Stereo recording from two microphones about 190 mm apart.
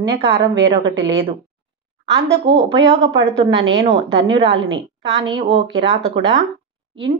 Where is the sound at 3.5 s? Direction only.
75° right (ahead or behind).